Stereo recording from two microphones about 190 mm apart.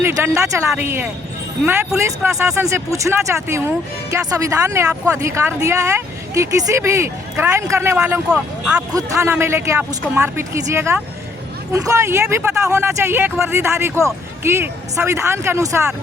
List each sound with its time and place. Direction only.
0.0 s speech: 15° right (ahead or behind)
8.9 s speech: 20° right (ahead or behind)